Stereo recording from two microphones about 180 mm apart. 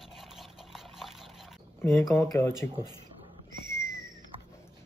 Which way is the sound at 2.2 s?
10° left (ahead or behind).